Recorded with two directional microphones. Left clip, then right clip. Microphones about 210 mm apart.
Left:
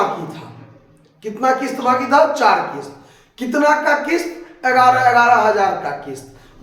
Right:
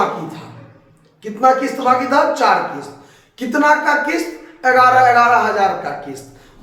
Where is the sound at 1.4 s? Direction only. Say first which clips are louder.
Right 3 dB; 20° left (ahead or behind).